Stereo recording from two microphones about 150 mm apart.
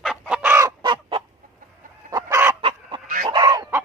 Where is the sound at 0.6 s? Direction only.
25° right (ahead or behind).